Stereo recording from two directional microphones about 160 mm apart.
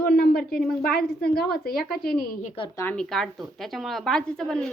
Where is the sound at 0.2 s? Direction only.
70° left (ahead or behind).